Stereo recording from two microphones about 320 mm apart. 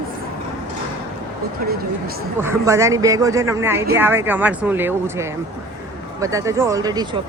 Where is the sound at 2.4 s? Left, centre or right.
Centre.